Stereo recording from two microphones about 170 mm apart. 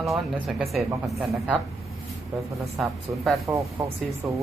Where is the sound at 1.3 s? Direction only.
10° right (ahead or behind).